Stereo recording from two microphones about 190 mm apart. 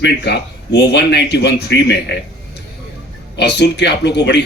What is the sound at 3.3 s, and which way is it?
Speech, 65° left (ahead or behind).